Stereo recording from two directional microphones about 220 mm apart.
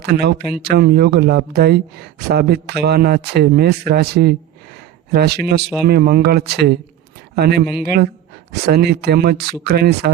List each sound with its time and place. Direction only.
0.0 s speech: 45° right (ahead or behind)
8.6 s speech: 45° right (ahead or behind)